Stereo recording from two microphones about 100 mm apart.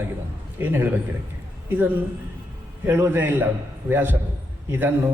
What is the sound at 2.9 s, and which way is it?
A man's voice, 20° right (ahead or behind).